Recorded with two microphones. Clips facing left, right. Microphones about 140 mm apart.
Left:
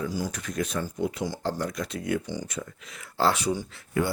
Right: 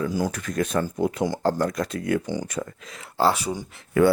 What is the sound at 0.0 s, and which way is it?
Speech, 55° right (ahead or behind).